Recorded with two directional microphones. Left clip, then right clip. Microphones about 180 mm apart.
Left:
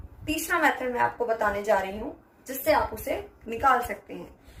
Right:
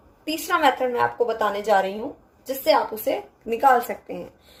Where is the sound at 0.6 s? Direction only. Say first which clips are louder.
Right 5 dB; 45° right (ahead or behind).